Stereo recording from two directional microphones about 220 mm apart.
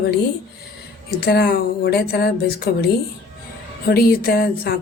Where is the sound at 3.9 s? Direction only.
45° left (ahead or behind).